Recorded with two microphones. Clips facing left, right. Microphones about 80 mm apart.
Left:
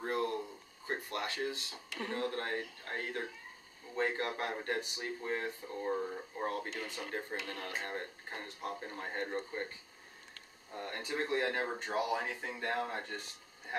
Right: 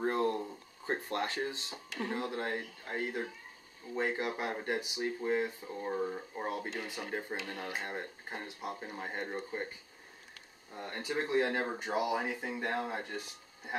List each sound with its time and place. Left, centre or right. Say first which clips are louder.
0.0 s a sound: right 4 dB; right
0.8 s speech: right 4 dB; right
2.0 s speech: right 1 dB; centre